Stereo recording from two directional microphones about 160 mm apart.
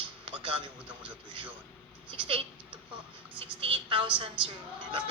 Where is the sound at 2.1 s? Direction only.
30° right (ahead or behind).